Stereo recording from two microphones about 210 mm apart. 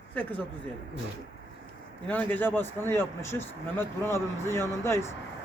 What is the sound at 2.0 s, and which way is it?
Speech, 10° left (ahead or behind).